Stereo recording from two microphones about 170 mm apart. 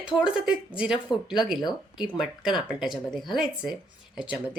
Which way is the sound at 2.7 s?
5° right (ahead or behind).